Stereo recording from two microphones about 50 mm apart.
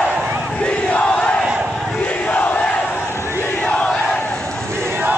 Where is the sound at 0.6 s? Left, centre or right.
Left.